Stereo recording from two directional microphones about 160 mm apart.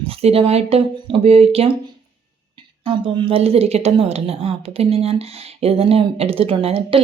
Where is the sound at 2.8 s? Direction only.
30° right (ahead or behind).